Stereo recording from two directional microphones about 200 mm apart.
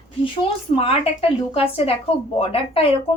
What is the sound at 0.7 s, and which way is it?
A woman's voice, 30° left (ahead or behind).